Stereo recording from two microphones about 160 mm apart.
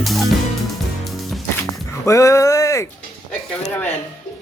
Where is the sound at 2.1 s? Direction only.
20° left (ahead or behind).